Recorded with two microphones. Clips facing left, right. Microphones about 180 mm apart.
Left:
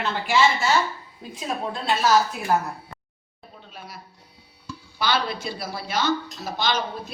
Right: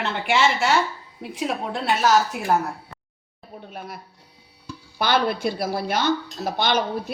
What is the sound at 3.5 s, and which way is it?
Speech, 55° right (ahead or behind).